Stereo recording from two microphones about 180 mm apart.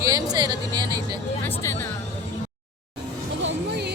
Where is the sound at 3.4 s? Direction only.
70° right (ahead or behind).